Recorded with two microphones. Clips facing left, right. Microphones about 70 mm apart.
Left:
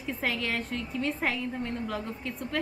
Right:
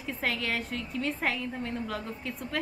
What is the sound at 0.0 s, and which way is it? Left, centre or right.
A woman's voice, centre.